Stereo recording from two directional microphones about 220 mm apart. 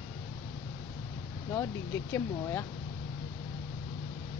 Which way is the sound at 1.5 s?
15° left (ahead or behind).